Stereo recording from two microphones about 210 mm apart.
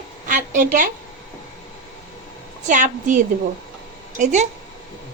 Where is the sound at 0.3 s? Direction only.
40° right (ahead or behind).